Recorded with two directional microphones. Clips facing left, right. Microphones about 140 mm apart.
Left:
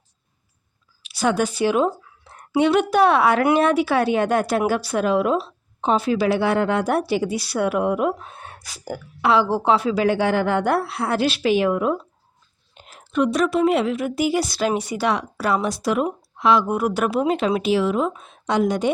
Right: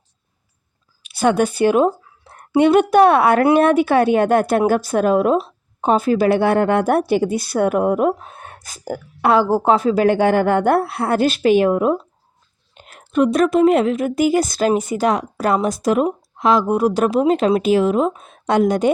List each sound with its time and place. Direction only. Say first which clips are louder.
1.0 s a woman's voice: right 4 dB; 55° right (ahead or behind)
12.7 s speech: right 4 dB; 60° right (ahead or behind)